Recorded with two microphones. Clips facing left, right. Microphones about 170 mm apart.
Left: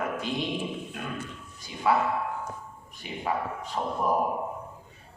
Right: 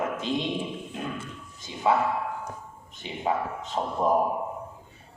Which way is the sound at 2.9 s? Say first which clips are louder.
Right 3 dB; 20° right (ahead or behind).